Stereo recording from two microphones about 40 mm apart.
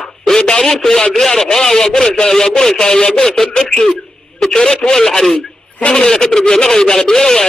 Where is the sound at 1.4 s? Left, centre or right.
Centre.